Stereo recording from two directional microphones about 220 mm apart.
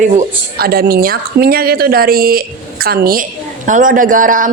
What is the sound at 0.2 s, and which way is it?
Speech, 45° right (ahead or behind).